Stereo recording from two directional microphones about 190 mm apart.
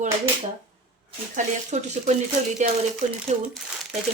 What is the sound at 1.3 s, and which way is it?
Speech, 40° right (ahead or behind).